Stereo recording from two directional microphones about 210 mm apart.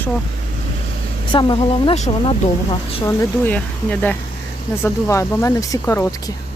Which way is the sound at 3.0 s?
10° left (ahead or behind).